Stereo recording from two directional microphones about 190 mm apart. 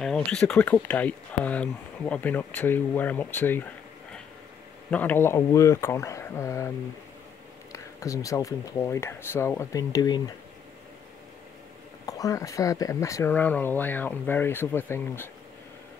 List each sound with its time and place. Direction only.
0.0 s speech: 5° left (ahead or behind)
4.9 s speech: 10° left (ahead or behind)
7.7 s speech: 15° left (ahead or behind)
12.1 s speech: 15° left (ahead or behind)